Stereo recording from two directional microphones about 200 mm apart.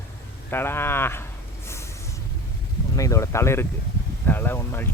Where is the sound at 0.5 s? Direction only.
10° left (ahead or behind).